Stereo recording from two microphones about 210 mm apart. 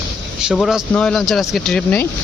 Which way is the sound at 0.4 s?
Centre (ahead or behind).